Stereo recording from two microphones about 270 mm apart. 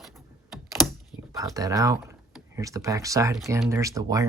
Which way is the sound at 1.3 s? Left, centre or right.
Centre.